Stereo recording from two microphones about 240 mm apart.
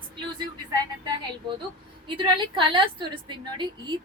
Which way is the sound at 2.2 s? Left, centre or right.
Centre.